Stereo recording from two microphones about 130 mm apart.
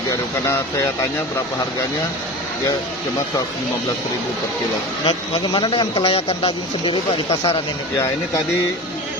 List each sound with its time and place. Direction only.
5.0 s a man's voice: 40° left (ahead or behind)